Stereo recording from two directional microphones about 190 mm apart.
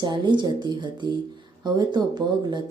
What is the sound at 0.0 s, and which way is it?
A woman's voice, 25° right (ahead or behind).